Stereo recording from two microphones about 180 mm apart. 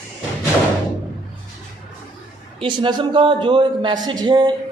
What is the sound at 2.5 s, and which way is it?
A man's voice, 25° right (ahead or behind).